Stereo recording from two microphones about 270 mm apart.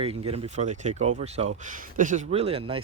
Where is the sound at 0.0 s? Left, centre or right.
Right.